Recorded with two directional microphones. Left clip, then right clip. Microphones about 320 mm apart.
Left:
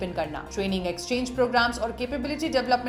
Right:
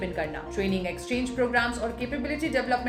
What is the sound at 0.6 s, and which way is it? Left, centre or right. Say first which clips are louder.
A woman's voice: left 2 dB; centre.